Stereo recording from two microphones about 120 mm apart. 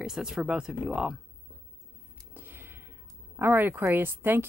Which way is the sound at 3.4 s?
20° right (ahead or behind).